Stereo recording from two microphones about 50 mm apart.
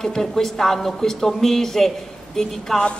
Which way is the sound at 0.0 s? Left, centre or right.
Centre.